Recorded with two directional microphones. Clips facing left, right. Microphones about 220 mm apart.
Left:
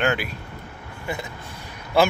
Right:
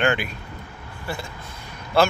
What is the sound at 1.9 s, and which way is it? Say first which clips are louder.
Speech: even; 15° left (ahead or behind).